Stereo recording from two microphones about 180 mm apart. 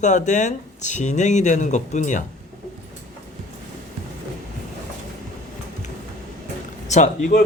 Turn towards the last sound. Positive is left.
turn(degrees=40)  # may be behind; listen again after turning